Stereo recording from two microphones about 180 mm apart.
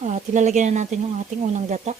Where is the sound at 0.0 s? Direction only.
40° right (ahead or behind).